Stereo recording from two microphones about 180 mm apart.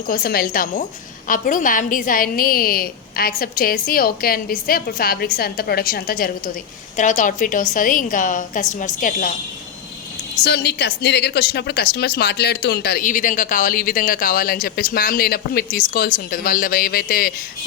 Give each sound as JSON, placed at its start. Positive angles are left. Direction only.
{"t": 0.1, "sound": "a woman's voice", "side_deg": 55}
{"t": 10.4, "sound": "a woman's voice", "side_deg": 65}